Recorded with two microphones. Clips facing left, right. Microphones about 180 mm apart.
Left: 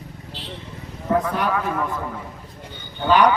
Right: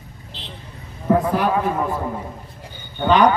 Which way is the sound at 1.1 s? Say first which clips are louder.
Even; 25° right (ahead or behind).